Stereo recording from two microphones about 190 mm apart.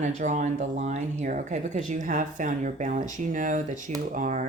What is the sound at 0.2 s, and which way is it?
Speech, 40° right (ahead or behind).